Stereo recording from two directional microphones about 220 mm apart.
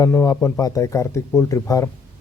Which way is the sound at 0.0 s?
15° left (ahead or behind).